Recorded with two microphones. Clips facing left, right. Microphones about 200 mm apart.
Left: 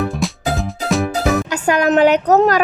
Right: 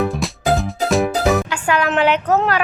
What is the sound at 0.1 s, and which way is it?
Music, centre (ahead or behind).